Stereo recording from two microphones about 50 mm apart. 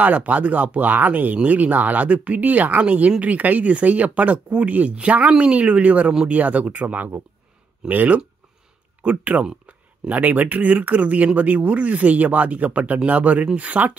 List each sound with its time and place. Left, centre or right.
0.0 s speech: right
9.2 s speech: right